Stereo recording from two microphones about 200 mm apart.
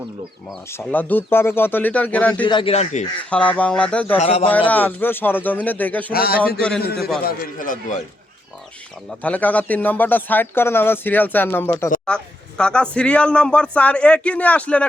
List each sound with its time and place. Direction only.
0.7 s speech: 10° left (ahead or behind)
2.4 s speech: 25° left (ahead or behind)
3.2 s speech: 5° left (ahead or behind)
4.2 s speech: 30° left (ahead or behind)
4.5 s speech: 10° left (ahead or behind)
6.1 s speech: 50° left (ahead or behind)
6.6 s speech: 5° left (ahead or behind)
6.8 s speech: 50° left (ahead or behind)
9.0 s speech: 5° left (ahead or behind)